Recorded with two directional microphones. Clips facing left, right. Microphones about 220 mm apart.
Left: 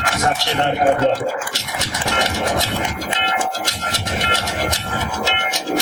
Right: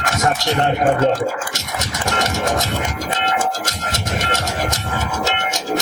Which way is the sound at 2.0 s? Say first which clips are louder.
Right 1 dB; 45° right (ahead or behind).